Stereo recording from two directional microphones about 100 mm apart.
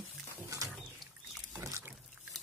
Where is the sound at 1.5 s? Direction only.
30° right (ahead or behind).